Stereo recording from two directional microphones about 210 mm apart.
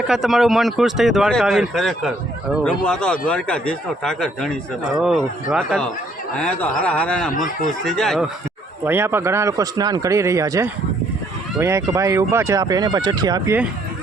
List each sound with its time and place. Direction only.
0.1 s speech: centre (ahead or behind)
8.8 s speech: 10° right (ahead or behind)